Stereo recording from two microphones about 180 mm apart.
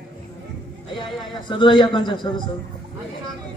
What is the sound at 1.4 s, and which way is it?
Speech, 25° left (ahead or behind).